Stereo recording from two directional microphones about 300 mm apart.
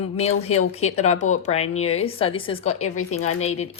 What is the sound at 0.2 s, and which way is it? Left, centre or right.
A woman's voice, left.